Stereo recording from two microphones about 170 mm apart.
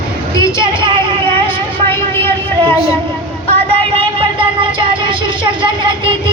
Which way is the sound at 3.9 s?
30° right (ahead or behind).